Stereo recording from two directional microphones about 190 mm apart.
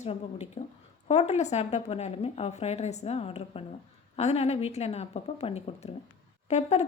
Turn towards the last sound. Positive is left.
turn(degrees=35)  # may be behind; listen again after turning